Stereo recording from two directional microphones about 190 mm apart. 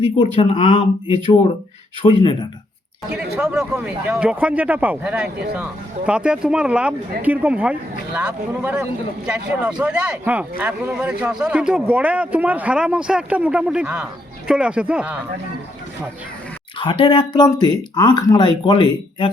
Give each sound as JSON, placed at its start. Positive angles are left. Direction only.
{"t": 0.2, "sound": "speech", "side_deg": 30}
{"t": 3.1, "sound": "speech", "side_deg": -5}
{"t": 16.7, "sound": "speech", "side_deg": 25}